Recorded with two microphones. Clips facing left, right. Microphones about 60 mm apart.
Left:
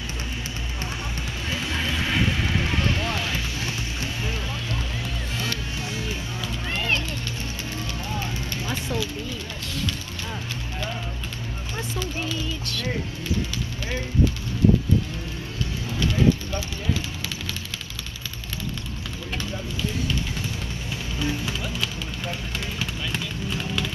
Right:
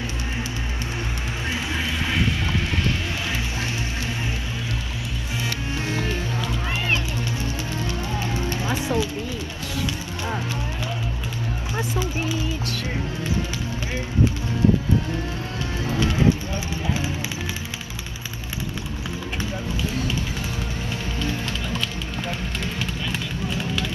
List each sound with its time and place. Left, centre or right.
1.7 s vehicle: centre
5.9 s livestock: right
8.2 s music: right
11.7 s a sound: centre
16.0 s run: right
21.2 s music: centre
22.8 s run: centre